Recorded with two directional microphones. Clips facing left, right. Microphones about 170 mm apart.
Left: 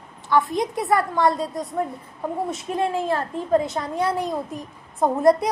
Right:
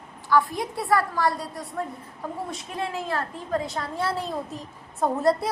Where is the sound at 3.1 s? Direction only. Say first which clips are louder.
Left 6 dB; 20° left (ahead or behind).